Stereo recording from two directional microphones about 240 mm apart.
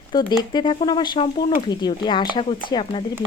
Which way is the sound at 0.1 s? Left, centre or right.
Centre.